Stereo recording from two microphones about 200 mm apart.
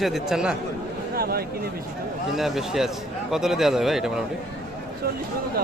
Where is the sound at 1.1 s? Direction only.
50° right (ahead or behind).